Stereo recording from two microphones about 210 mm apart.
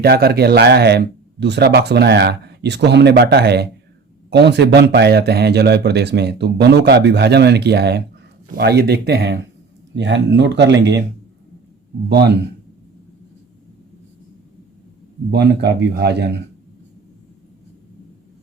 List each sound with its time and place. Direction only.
0.0 s speech: 45° right (ahead or behind)
12.0 s speech: 50° right (ahead or behind)
15.3 s speech: 55° right (ahead or behind)